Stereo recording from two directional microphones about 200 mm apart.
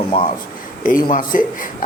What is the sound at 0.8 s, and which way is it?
Speech, 40° left (ahead or behind).